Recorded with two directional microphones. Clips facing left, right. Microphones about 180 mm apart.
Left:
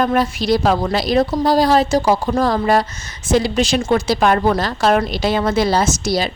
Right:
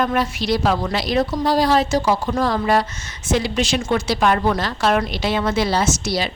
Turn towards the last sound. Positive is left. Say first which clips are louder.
# left 3 dB
turn(degrees=40)  # may be behind; listen again after turning